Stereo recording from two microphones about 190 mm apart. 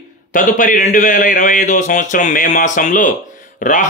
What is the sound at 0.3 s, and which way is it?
A man's voice, 45° left (ahead or behind).